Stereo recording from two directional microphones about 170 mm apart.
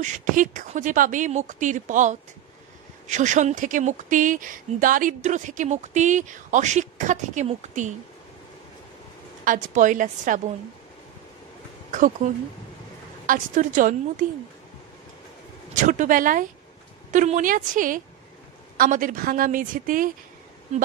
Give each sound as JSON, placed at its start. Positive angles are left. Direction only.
{"t": 0.0, "sound": "speech", "side_deg": -50}
{"t": 9.4, "sound": "speech", "side_deg": -50}
{"t": 12.2, "sound": "speech", "side_deg": -40}
{"t": 15.7, "sound": "speech", "side_deg": -45}